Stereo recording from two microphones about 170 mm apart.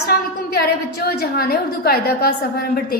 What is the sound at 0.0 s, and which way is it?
A woman's voice, 65° left (ahead or behind).